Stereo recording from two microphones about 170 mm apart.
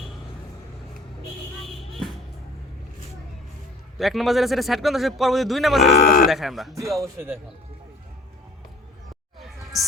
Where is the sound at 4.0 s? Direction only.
Centre (ahead or behind).